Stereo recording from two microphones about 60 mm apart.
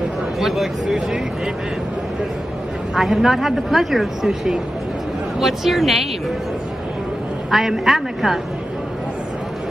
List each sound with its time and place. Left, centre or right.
0.4 s speech: centre
2.9 s speech: centre
7.5 s speech: centre